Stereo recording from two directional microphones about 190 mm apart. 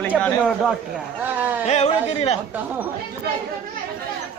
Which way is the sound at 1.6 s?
35° left (ahead or behind).